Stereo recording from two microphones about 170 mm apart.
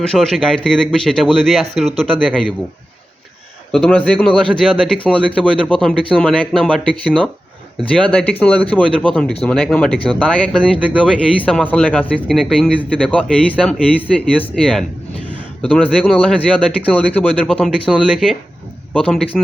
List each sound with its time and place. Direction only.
0.1 s speech: 5° left (ahead or behind)
3.7 s speech: 5° left (ahead or behind)